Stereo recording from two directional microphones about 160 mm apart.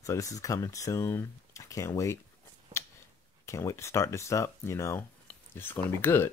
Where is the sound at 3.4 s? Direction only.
20° left (ahead or behind).